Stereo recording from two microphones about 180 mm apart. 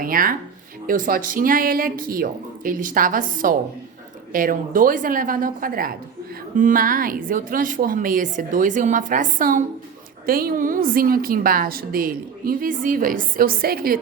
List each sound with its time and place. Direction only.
0.0 s a woman's voice: 50° right (ahead or behind)